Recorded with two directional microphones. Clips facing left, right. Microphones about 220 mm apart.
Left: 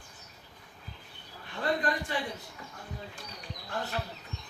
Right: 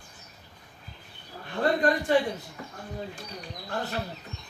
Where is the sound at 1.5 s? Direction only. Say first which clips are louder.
Right 6 dB; 50° right (ahead or behind).